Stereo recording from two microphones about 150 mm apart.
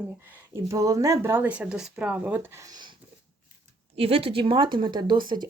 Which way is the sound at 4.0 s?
40° right (ahead or behind).